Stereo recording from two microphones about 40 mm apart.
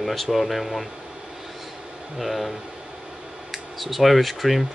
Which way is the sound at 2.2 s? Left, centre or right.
Centre.